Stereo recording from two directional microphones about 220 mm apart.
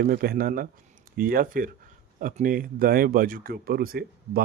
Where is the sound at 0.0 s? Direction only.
45° right (ahead or behind).